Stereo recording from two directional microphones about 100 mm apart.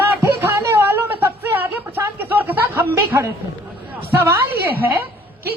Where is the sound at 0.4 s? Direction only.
25° right (ahead or behind).